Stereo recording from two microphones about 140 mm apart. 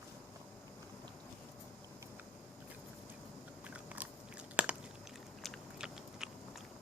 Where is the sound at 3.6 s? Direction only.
10° right (ahead or behind).